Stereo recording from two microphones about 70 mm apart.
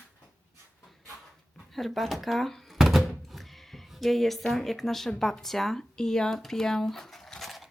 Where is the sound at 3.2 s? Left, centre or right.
Centre.